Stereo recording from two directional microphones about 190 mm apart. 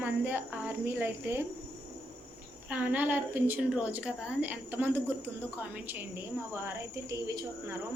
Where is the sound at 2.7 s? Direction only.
10° right (ahead or behind).